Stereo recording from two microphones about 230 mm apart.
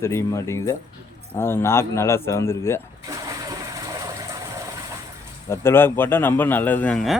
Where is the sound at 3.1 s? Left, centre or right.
Centre.